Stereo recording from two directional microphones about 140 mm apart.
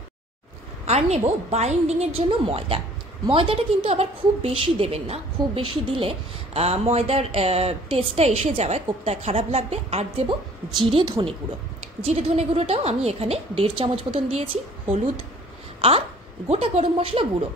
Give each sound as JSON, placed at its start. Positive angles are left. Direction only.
{"t": 0.8, "sound": "a woman's voice", "side_deg": -50}
{"t": 10.8, "sound": "a woman's voice", "side_deg": -35}
{"t": 11.8, "sound": "a woman's voice", "side_deg": -50}
{"t": 15.8, "sound": "a woman's voice", "side_deg": -40}